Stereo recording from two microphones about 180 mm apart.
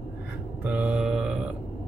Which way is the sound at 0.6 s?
5° right (ahead or behind).